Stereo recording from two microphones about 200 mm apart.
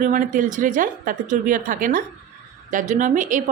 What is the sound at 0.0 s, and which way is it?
A woman's voice, 40° right (ahead or behind).